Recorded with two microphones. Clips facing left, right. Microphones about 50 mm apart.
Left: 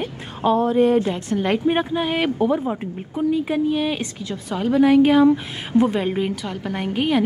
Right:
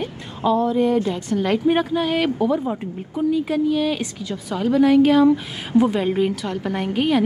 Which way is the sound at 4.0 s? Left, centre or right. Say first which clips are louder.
Right 1 dB; centre.